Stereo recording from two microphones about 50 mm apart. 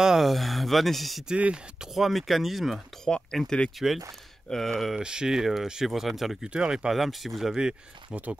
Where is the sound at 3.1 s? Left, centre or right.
Centre.